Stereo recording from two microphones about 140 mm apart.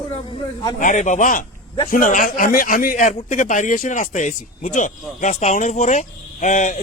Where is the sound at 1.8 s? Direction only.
80° left.